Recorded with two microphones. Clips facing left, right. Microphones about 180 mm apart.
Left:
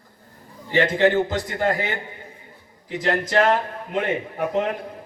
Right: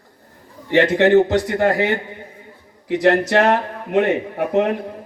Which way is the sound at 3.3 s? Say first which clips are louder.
Right 3 dB; 45° right (ahead or behind).